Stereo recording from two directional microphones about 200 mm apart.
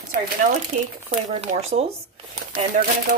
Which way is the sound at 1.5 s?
30° right (ahead or behind).